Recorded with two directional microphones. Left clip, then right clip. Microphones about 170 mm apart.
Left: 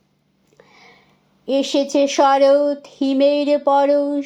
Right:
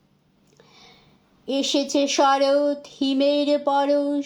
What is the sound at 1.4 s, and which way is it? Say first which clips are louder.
Speech: left 5 dB; 15° left (ahead or behind).